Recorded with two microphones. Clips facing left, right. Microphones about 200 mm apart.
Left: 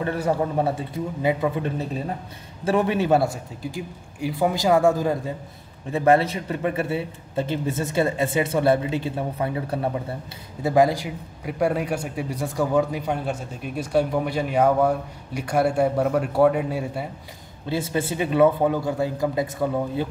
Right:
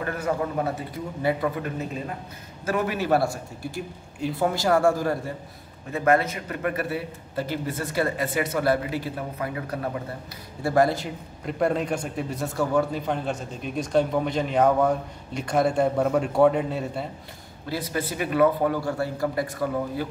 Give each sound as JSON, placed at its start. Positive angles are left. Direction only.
{"t": 0.0, "sound": "a man's voice", "side_deg": 30}
{"t": 5.9, "sound": "a man's voice", "side_deg": 30}
{"t": 10.6, "sound": "a man's voice", "side_deg": 15}
{"t": 17.6, "sound": "a man's voice", "side_deg": 25}